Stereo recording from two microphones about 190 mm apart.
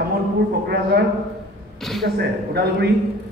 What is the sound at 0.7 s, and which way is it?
Speech, 55° right (ahead or behind).